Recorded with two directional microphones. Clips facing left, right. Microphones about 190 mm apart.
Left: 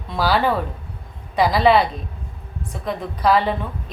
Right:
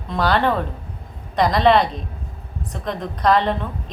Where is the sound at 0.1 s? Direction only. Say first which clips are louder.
Even; 5° left (ahead or behind).